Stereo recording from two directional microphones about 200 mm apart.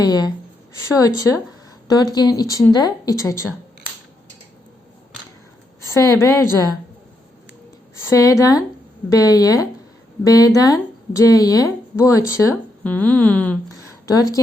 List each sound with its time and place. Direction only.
0.0 s speech: 20° left (ahead or behind)
5.9 s speech: 15° left (ahead or behind)
8.1 s a woman's voice: 15° left (ahead or behind)